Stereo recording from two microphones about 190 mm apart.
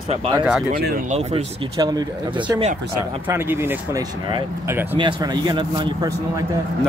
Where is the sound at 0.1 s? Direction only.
30° right (ahead or behind).